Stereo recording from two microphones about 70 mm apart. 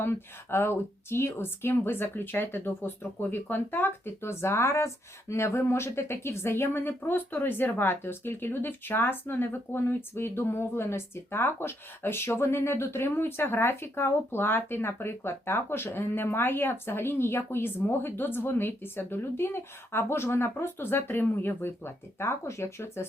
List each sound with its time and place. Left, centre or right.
0.0 s speech: left